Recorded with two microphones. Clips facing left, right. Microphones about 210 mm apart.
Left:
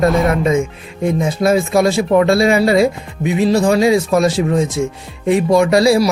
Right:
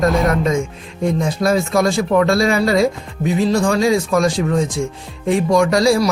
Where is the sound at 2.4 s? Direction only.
15° left (ahead or behind).